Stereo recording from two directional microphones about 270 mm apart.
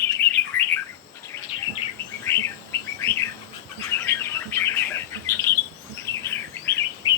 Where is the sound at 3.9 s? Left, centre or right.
Centre.